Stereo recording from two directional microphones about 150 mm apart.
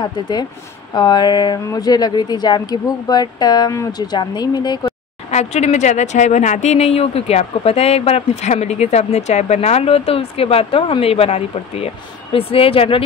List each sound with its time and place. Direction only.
0.0 s speech: 30° left (ahead or behind)
5.3 s speech: 45° left (ahead or behind)